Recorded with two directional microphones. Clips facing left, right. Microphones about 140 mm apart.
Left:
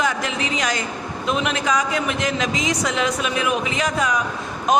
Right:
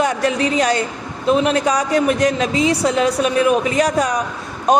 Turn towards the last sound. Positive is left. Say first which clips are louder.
# right 3 dB
turn(degrees=-35)  # may be behind; listen again after turning